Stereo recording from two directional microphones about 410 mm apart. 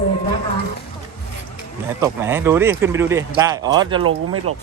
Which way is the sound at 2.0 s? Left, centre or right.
Centre.